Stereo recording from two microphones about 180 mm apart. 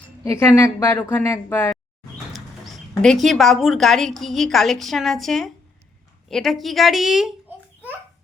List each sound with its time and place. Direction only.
0.3 s a woman's voice: 15° left (ahead or behind)
3.0 s a woman's voice: centre (ahead or behind)